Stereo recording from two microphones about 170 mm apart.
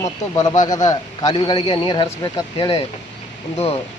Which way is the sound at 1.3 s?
35° left (ahead or behind).